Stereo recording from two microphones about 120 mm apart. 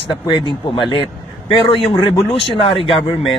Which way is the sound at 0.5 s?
40° left (ahead or behind).